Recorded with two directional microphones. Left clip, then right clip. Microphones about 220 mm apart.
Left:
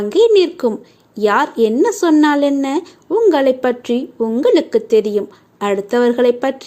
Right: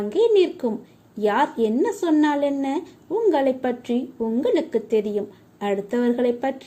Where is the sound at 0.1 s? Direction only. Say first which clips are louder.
Left 7 dB; 15° left (ahead or behind).